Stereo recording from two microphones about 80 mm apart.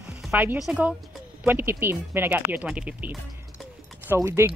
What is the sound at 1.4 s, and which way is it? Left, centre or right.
Speech, right.